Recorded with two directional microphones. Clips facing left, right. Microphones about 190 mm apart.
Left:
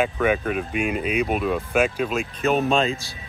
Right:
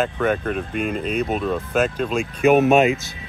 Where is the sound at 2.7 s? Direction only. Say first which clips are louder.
Right 6 dB; 20° right (ahead or behind).